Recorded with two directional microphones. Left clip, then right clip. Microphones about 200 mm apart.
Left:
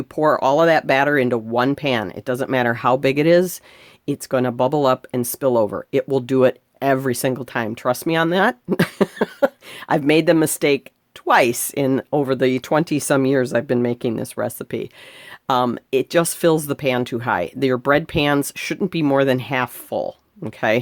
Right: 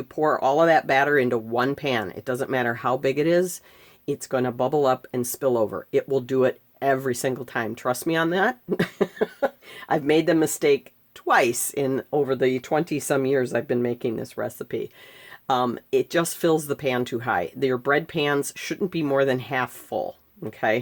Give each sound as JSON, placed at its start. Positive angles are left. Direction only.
{"t": 0.2, "sound": "speech", "side_deg": 35}